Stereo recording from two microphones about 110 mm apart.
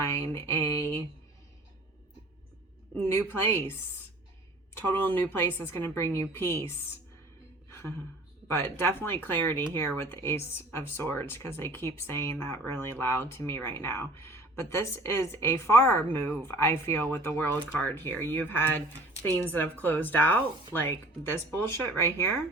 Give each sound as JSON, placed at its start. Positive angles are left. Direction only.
{"t": 0.0, "sound": "speech", "side_deg": 20}
{"t": 3.0, "sound": "speech", "side_deg": 20}
{"t": 4.9, "sound": "speech", "side_deg": 15}
{"t": 7.7, "sound": "a sound", "side_deg": 20}
{"t": 8.4, "sound": "speech", "side_deg": 20}